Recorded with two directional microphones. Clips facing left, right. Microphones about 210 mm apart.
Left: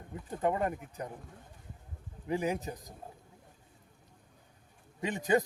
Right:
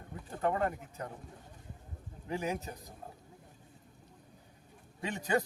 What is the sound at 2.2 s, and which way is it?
Speech, 15° left (ahead or behind).